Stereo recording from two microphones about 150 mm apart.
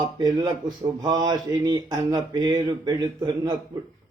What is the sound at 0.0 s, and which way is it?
Mantra, 25° right (ahead or behind).